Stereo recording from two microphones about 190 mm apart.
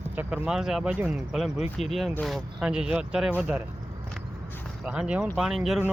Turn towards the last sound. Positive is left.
turn(degrees=0)  # may be behind; listen again after turning